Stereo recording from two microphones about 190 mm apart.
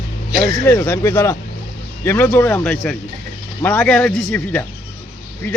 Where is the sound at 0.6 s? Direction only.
15° left (ahead or behind).